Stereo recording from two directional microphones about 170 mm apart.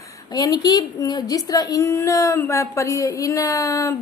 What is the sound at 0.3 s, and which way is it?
A woman's voice, 25° left (ahead or behind).